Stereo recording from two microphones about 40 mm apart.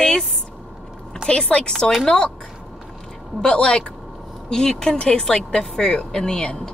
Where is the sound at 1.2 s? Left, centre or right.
Centre.